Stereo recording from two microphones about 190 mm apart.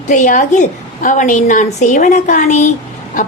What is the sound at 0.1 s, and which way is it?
A woman's voice, 40° left (ahead or behind).